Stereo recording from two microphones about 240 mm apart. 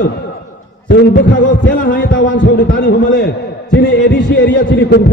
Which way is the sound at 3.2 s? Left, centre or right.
Left.